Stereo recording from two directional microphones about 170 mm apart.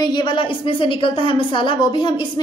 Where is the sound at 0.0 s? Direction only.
25° left (ahead or behind).